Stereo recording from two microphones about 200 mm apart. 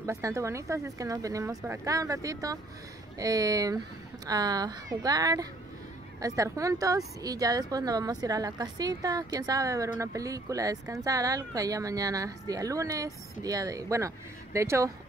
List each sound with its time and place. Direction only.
0.0 s speech: 15° right (ahead or behind)